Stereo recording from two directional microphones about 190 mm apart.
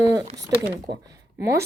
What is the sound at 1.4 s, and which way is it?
Speech, 15° right (ahead or behind).